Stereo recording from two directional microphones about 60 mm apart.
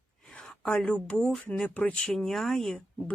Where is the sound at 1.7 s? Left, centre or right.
Left.